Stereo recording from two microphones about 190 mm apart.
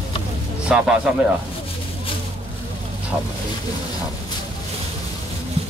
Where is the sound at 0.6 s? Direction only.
5° right (ahead or behind).